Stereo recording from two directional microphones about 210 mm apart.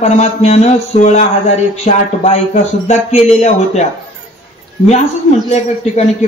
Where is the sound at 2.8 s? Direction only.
30° left (ahead or behind).